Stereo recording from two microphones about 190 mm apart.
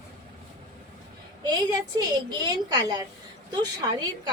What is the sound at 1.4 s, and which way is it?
A woman's voice, 20° right (ahead or behind).